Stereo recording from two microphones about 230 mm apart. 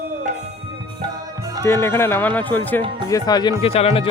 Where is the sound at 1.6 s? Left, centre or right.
Centre.